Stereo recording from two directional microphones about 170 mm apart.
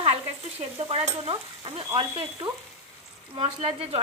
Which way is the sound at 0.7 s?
35° right (ahead or behind).